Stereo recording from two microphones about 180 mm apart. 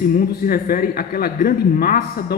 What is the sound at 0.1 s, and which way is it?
A man's voice, 55° left (ahead or behind).